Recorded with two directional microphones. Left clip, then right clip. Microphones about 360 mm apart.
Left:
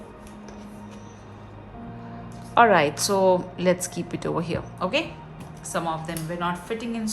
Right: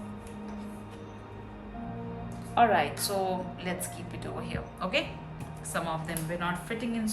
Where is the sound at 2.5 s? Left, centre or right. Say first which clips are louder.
Left 7 dB; centre.